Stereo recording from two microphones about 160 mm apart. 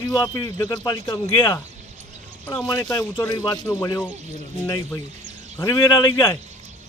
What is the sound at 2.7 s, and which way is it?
Speech, 20° left (ahead or behind).